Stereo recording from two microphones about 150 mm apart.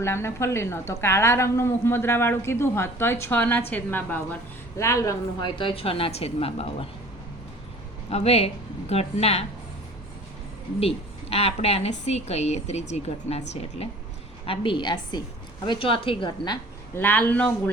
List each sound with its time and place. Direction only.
0.0 s a woman's voice: 15° left (ahead or behind)
5.5 s a woman's voice: 35° left (ahead or behind)
8.1 s a woman's voice: 45° left (ahead or behind)
10.8 s a woman's voice: 40° left (ahead or behind)
16.9 s a woman's voice: 10° left (ahead or behind)